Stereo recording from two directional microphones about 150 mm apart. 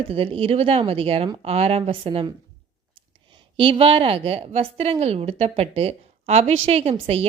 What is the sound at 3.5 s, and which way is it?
A woman's voice, 35° right (ahead or behind).